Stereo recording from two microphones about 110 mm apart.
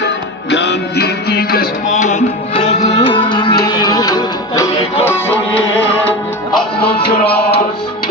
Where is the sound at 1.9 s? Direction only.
85° left.